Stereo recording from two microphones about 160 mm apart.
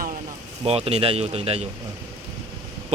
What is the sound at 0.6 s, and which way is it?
Speech, 40° right (ahead or behind).